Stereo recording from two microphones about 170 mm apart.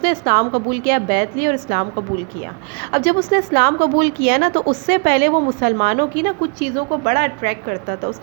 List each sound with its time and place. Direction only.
0.0 s a woman's voice: 60° right (ahead or behind)
2.9 s a woman's voice: 60° right (ahead or behind)